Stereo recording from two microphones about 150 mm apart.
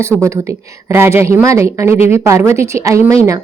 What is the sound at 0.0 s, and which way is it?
Speech, 20° right (ahead or behind).